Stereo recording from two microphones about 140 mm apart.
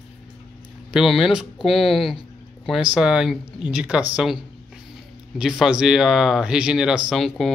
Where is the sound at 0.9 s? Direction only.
Centre (ahead or behind).